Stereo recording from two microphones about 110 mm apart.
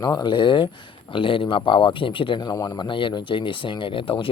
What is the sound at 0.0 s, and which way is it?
Speech, 40° left (ahead or behind).